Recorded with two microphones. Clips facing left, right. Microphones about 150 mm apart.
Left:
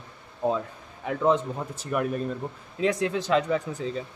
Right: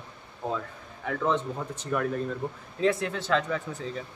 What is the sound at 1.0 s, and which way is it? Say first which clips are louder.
Speech: left 4 dB; 15° left (ahead or behind).